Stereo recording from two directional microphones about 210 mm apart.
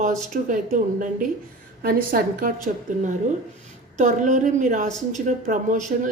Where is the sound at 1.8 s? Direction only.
45° right (ahead or behind).